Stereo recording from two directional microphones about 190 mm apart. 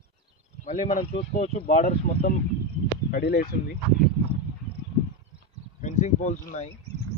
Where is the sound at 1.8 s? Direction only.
50° left (ahead or behind).